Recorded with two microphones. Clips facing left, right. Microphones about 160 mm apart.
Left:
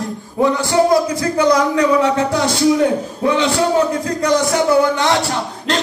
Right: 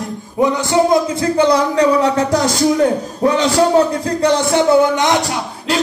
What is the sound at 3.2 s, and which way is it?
Music, 35° right (ahead or behind).